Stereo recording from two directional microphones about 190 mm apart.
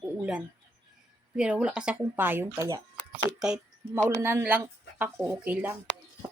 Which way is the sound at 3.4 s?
5° right (ahead or behind).